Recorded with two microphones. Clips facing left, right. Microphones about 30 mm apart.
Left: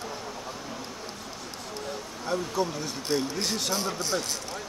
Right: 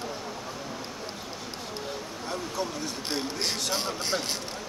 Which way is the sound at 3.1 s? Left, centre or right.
Centre.